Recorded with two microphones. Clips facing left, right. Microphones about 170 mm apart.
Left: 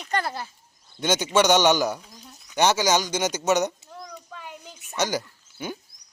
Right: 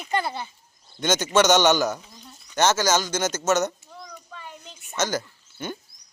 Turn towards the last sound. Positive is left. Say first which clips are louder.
# even
turn(degrees=10)  # may be behind; listen again after turning